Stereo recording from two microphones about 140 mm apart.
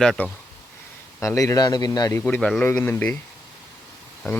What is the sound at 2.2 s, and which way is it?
Speech, 10° left (ahead or behind).